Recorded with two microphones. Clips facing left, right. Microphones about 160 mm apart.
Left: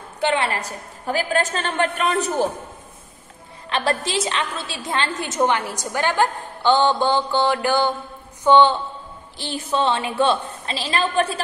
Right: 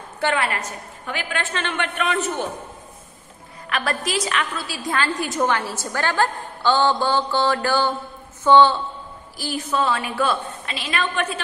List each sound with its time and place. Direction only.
0.2 s a woman's voice: 25° left (ahead or behind)
3.6 s a woman's voice: 30° left (ahead or behind)